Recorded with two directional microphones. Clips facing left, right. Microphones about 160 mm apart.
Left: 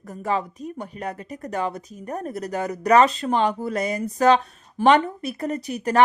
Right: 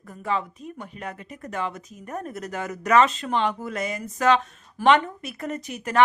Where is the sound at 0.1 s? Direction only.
40° left (ahead or behind).